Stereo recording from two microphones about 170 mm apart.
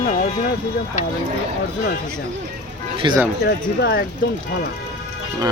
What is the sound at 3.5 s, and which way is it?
Speech, 70° left (ahead or behind).